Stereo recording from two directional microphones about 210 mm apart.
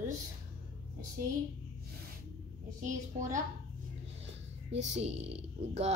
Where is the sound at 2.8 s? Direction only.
35° right (ahead or behind).